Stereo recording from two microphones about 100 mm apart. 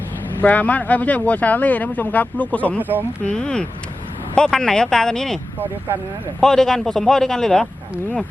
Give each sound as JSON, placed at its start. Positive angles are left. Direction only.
{"t": 0.4, "sound": "a man's voice", "side_deg": 15}
{"t": 6.4, "sound": "a man's voice", "side_deg": 5}